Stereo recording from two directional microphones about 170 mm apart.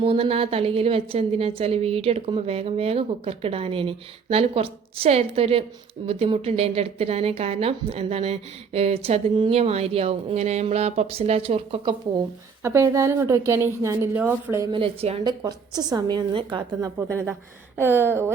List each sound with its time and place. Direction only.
0.0 s speech: 35° right (ahead or behind)
12.6 s a woman's voice: 15° right (ahead or behind)
14.7 s speech: 35° right (ahead or behind)
15.3 s a woman's voice: 25° right (ahead or behind)
17.1 s a woman's voice: 15° right (ahead or behind)